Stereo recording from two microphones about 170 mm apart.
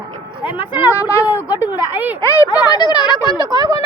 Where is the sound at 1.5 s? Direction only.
20° left (ahead or behind).